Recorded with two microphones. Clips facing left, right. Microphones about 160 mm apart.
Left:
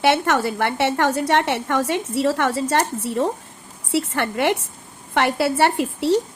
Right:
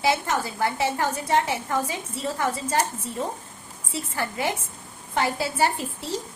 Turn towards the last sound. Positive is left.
turn(degrees=75)  # may be behind; listen again after turning